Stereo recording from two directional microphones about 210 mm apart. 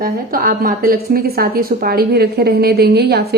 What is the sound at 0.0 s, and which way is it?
Speech, 45° right (ahead or behind).